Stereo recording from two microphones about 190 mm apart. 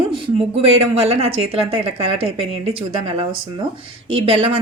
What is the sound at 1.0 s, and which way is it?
A woman's voice, 30° right (ahead or behind).